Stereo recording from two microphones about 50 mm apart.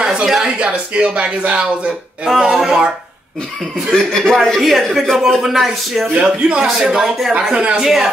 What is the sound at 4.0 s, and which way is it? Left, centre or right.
Speech, centre.